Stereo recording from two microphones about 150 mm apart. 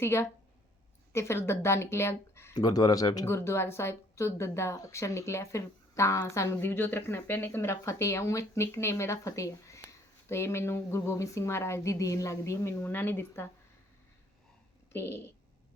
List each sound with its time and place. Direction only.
0.0 s speech: 20° left (ahead or behind)
14.9 s speech: 15° left (ahead or behind)